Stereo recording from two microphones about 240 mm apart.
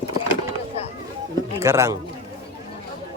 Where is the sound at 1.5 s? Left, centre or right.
Centre.